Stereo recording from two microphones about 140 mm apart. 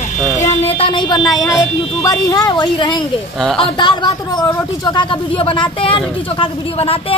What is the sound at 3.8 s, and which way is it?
Speech, 30° left (ahead or behind).